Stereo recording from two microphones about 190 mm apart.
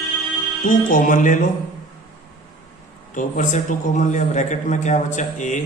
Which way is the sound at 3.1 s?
40° left (ahead or behind).